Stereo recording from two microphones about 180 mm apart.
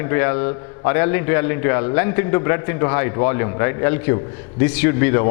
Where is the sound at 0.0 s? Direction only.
15° left (ahead or behind).